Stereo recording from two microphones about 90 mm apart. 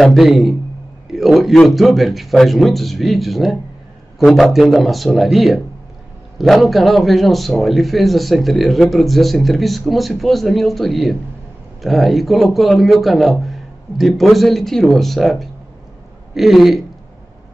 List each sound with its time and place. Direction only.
0.0 s a man's voice: centre (ahead or behind)